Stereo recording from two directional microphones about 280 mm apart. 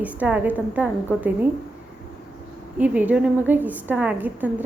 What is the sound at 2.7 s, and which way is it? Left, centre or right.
A woman's voice, centre.